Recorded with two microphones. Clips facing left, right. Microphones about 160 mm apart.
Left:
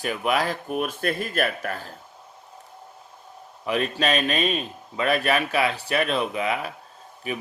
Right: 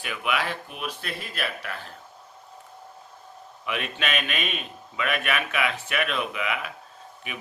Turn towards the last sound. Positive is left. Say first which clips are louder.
# left 7 dB
turn(degrees=35)  # may be behind; listen again after turning